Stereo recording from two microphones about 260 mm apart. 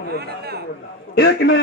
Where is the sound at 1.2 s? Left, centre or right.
Left.